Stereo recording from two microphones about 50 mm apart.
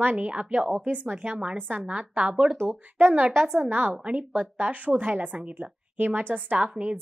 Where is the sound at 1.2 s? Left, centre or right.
Centre.